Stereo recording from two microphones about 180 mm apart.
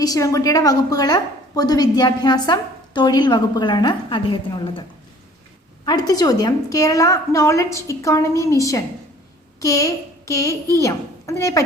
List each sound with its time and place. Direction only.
0.0 s a woman's voice: 20° left (ahead or behind)
5.8 s a woman's voice: 20° left (ahead or behind)